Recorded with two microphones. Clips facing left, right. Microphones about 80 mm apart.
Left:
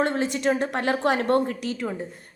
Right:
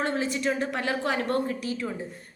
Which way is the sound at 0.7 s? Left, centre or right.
Left.